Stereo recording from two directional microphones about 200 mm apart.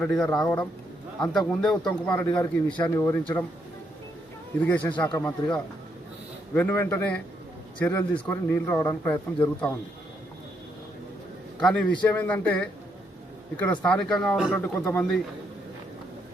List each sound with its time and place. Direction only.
0.0 s a man's voice: 5° left (ahead or behind)
2.2 s a man's voice: 20° left (ahead or behind)
2.6 s speech: 5° left (ahead or behind)
4.6 s speech: 10° left (ahead or behind)
11.6 s a man's voice: 5° left (ahead or behind)